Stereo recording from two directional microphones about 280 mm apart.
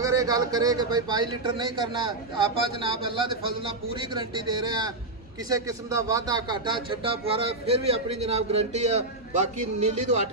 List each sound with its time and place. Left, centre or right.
0.0 s speech: centre